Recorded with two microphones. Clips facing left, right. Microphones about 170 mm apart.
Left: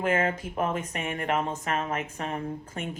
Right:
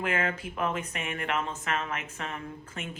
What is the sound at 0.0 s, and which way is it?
Speech, 35° left (ahead or behind).